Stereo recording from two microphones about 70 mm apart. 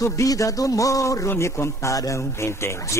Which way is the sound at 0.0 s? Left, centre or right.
Left.